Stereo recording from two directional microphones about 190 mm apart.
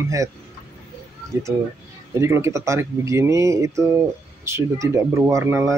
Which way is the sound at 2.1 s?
15° right (ahead or behind).